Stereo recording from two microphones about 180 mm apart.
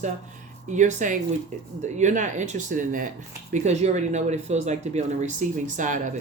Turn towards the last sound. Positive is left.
turn(degrees=-45)  # may be behind; listen again after turning